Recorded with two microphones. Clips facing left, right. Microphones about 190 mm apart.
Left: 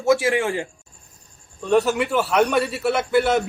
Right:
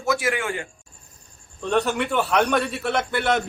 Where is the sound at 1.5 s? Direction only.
5° left (ahead or behind).